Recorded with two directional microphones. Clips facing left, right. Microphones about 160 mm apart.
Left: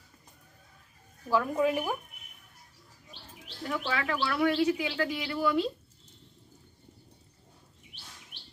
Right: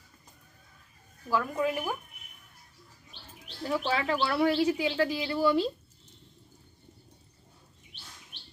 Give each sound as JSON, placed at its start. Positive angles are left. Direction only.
{"t": 1.3, "sound": "a woman's voice", "side_deg": 10}
{"t": 3.7, "sound": "speech", "side_deg": -30}